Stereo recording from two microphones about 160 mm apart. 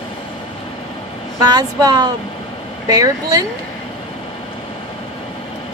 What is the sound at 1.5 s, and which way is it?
A woman's voice, 25° right (ahead or behind).